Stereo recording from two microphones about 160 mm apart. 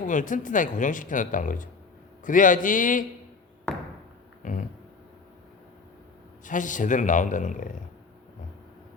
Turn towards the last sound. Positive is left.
turn(degrees=55)  # may be behind; listen again after turning